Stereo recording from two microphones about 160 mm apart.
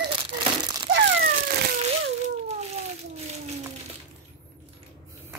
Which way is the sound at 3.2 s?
45° right (ahead or behind).